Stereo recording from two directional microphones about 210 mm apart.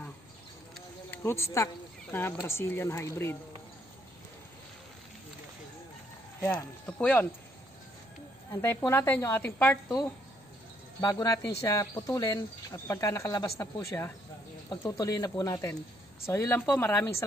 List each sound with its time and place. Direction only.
0.7 s a sound: 10° left (ahead or behind)
2.4 s speech: 10° left (ahead or behind)
6.4 s speech: 5° left (ahead or behind)
8.5 s speech: 10° left (ahead or behind)
11.0 s speech: 15° left (ahead or behind)